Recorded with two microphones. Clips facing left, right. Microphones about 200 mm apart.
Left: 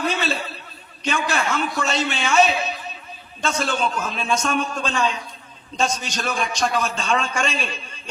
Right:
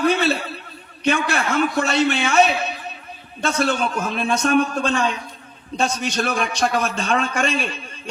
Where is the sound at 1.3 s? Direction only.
60° right (ahead or behind).